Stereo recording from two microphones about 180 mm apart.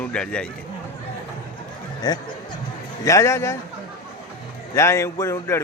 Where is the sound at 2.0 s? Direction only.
20° left (ahead or behind).